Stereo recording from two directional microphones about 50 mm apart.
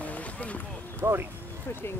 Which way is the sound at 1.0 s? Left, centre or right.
Right.